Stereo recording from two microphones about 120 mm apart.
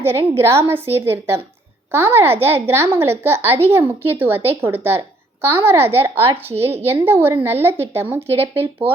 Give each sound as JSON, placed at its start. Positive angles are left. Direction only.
{"t": 0.0, "sound": "a child's voice", "side_deg": -20}